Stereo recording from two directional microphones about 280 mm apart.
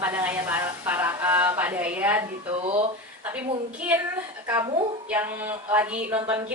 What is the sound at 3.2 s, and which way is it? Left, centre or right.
A woman's voice, centre.